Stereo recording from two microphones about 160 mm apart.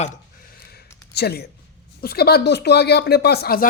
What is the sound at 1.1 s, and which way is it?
Speech, 90° left.